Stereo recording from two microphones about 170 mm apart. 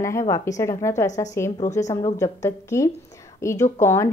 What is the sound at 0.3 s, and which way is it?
A woman's voice, 20° left (ahead or behind).